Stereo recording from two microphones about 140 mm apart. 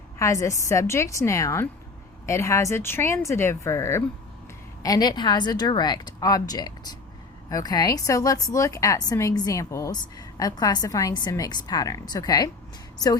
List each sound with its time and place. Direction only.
0.2 s a woman's voice: 20° left (ahead or behind)